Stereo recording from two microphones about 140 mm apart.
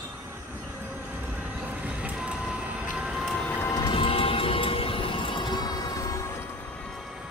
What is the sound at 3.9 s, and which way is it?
Music, 40° left (ahead or behind).